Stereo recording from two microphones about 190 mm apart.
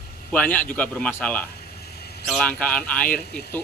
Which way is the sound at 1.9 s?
55° left (ahead or behind).